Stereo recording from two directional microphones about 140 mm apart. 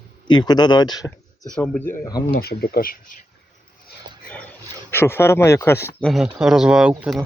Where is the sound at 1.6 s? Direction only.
15° left (ahead or behind).